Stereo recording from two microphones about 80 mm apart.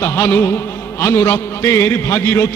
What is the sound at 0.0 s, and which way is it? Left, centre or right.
A man's voice, left.